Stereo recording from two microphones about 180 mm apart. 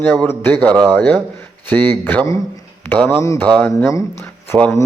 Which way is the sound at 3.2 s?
15° left (ahead or behind).